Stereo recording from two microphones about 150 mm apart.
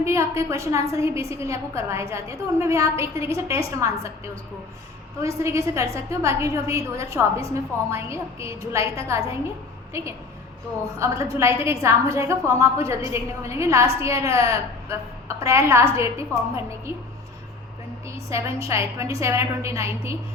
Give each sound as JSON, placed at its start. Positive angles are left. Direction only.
{"t": 0.0, "sound": "a woman's voice", "side_deg": -20}
{"t": 5.2, "sound": "a woman's voice", "side_deg": -20}
{"t": 18.3, "sound": "a woman's voice", "side_deg": -20}